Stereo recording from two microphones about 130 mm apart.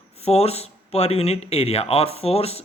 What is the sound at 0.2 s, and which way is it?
Speech, 50° left (ahead or behind).